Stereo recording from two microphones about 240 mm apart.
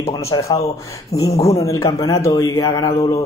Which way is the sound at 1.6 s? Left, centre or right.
Centre.